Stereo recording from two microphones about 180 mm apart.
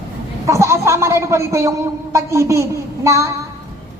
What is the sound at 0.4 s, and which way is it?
Speech, 15° right (ahead or behind).